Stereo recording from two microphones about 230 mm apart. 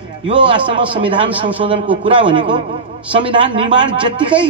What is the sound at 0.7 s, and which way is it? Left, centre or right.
Speech, right.